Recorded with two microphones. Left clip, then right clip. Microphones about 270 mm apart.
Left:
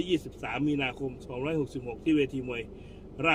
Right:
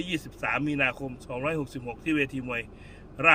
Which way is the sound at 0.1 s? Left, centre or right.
Right.